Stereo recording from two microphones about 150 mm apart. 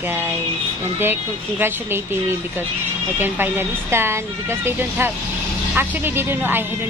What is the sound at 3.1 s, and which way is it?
Speech, 15° right (ahead or behind).